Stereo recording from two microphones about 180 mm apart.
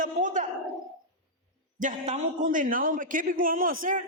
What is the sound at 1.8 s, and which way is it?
A man's voice, 40° right (ahead or behind).